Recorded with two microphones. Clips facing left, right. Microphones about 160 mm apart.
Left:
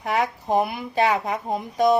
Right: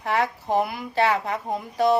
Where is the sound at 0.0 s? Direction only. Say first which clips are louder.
Even; 15° left (ahead or behind).